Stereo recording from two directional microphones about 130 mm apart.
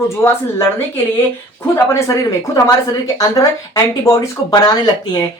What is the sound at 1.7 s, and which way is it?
A woman's voice, 25° left (ahead or behind).